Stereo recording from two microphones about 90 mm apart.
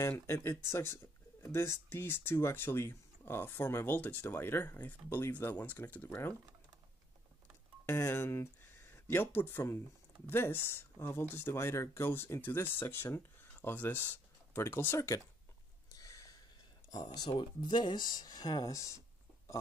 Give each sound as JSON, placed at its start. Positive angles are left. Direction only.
{"t": 0.3, "sound": "speech", "side_deg": 30}
{"t": 7.8, "sound": "speech", "side_deg": 30}
{"t": 15.9, "sound": "a sound", "side_deg": 40}
{"t": 16.9, "sound": "speech", "side_deg": 45}
{"t": 17.3, "sound": "speech", "side_deg": 60}